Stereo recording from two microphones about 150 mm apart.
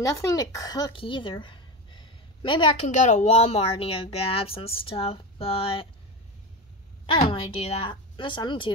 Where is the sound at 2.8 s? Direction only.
50° left (ahead or behind).